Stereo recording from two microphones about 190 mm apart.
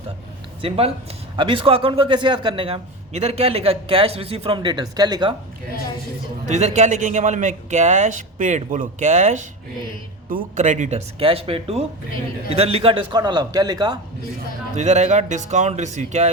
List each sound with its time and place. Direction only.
0.6 s a man's voice: 30° right (ahead or behind)
6.5 s a man's voice: 35° right (ahead or behind); by 14.0 s 20° right (ahead or behind)
14.8 s a man's voice: 35° right (ahead or behind)